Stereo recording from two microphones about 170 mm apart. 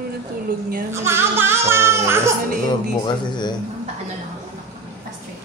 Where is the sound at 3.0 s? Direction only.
25° left (ahead or behind).